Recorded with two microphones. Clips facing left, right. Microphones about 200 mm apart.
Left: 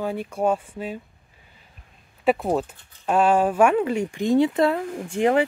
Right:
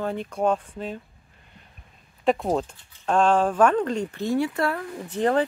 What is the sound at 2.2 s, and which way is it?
Speech, 5° left (ahead or behind).